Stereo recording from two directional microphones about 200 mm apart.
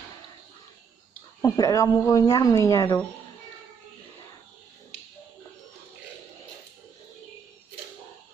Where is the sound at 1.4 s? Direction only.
15° left (ahead or behind).